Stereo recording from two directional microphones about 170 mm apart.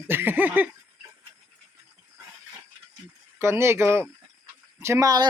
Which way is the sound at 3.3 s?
15° right (ahead or behind).